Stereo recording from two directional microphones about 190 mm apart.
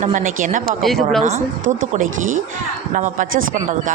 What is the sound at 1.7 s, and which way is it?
Speech, 40° right (ahead or behind).